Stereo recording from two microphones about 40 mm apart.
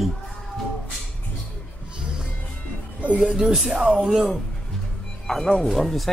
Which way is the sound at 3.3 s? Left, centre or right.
Centre.